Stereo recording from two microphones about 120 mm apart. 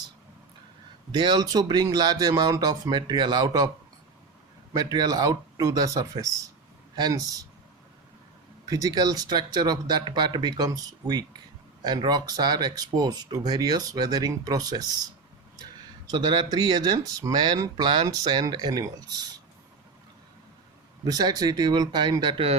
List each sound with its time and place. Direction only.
1.1 s speech: 40° right (ahead or behind)
4.7 s speech: 35° right (ahead or behind)
8.6 s speech: 30° right (ahead or behind)
16.0 s speech: 35° right (ahead or behind)
21.0 s speech: 35° right (ahead or behind)